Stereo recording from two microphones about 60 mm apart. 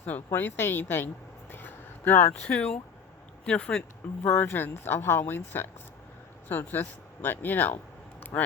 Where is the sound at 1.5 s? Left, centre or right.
Left.